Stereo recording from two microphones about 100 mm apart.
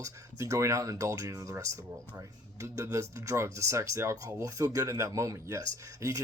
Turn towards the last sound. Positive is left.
turn(degrees=-35)  # may be behind; listen again after turning